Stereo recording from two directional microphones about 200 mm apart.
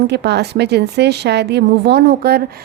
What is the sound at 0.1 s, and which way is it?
A woman's voice, 55° right (ahead or behind).